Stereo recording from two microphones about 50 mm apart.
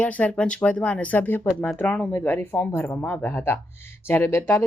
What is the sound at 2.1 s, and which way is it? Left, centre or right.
Speech, left.